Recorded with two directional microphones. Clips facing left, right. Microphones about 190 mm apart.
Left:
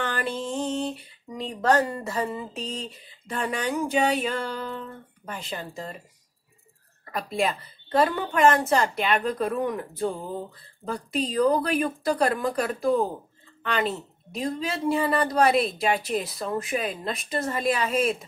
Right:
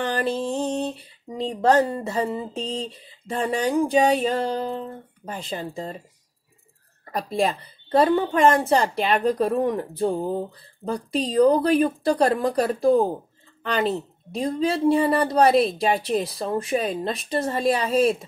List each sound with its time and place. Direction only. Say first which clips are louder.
0.2 s speech: right 4 dB; 35° right (ahead or behind)
7.1 s speech: right 3 dB; 35° right (ahead or behind)